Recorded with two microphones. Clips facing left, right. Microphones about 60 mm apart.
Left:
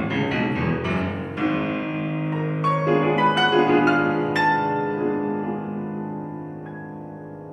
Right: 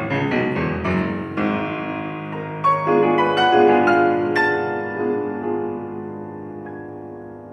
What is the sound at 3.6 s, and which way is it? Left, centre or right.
Music, right.